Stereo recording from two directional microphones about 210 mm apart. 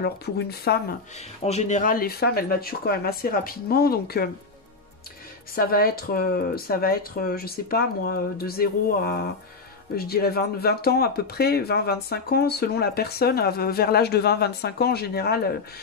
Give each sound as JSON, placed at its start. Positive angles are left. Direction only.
{"t": 0.0, "sound": "speech", "side_deg": 50}
{"t": 1.4, "sound": "speech", "side_deg": 30}
{"t": 5.5, "sound": "speech", "side_deg": 45}